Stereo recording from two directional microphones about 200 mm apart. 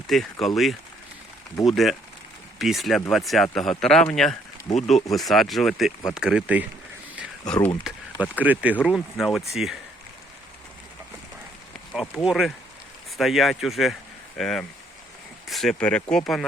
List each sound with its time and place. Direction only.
0.1 s speech: centre (ahead or behind)
4.7 s speech: 15° left (ahead or behind)
5.1 s speech: centre (ahead or behind)
7.4 s speech: 5° left (ahead or behind)
7.9 s speech: 5° right (ahead or behind)
11.9 s speech: centre (ahead or behind)